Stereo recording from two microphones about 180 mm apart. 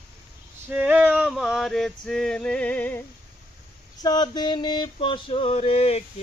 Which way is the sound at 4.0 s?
20° left (ahead or behind).